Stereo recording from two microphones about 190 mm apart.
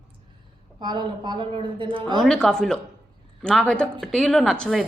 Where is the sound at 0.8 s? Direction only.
25° right (ahead or behind).